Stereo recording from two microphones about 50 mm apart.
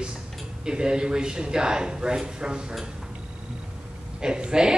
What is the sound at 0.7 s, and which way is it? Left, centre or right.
Speech, centre.